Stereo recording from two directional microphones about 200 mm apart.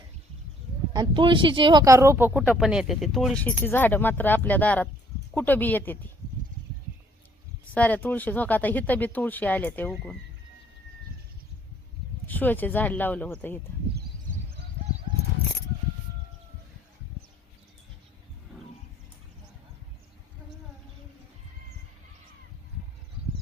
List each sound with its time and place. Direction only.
0.9 s speech: 25° right (ahead or behind); by 6.1 s 10° left (ahead or behind)
7.7 s speech: 5° left (ahead or behind)
12.3 s speech: 10° left (ahead or behind)